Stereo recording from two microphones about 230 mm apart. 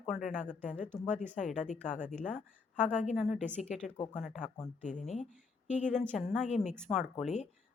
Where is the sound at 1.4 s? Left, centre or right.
Centre.